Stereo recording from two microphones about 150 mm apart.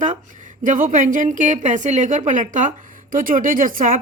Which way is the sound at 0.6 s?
60° right (ahead or behind).